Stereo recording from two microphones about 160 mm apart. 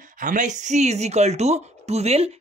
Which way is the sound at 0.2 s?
50° right (ahead or behind).